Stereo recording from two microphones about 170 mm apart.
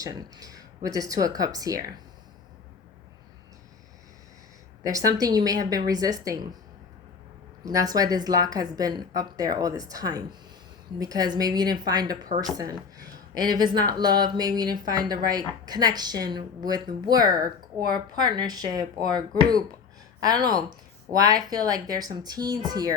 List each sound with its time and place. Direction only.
0.0 s speech: 20° right (ahead or behind)
4.9 s speech: 20° right (ahead or behind)
7.6 s speech: 20° right (ahead or behind)
13.3 s speech: 25° right (ahead or behind)
20.2 s speech: 25° right (ahead or behind)